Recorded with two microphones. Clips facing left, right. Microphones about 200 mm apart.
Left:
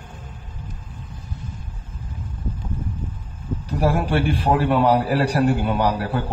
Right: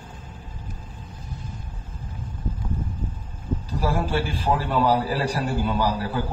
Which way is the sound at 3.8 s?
65° left (ahead or behind).